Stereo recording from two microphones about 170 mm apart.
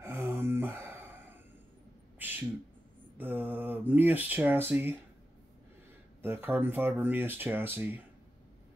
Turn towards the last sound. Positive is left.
turn(degrees=-10)  # may be behind; listen again after turning